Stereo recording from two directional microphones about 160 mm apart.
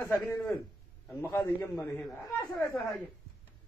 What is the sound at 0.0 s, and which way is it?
A man's voice, 10° left (ahead or behind).